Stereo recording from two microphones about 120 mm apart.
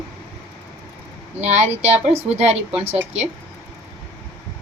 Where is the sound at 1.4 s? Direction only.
75° right (ahead or behind).